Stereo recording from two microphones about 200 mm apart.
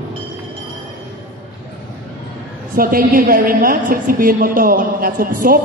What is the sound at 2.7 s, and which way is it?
A woman's voice, 45° right (ahead or behind).